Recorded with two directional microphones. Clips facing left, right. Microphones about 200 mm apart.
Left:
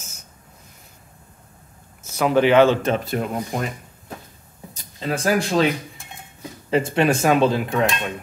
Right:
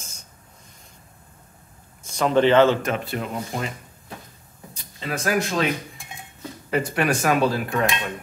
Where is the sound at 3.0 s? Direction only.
45° left (ahead or behind).